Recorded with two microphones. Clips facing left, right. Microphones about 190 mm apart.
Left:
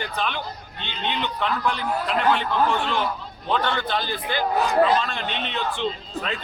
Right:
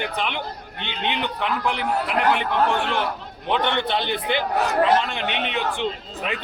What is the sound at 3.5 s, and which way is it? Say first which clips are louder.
A man's voice: right 2 dB; 20° right (ahead or behind).